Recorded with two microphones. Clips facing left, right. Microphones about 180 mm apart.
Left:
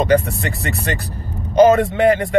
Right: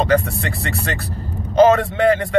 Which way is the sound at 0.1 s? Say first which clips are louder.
Left 2 dB; 15° left (ahead or behind).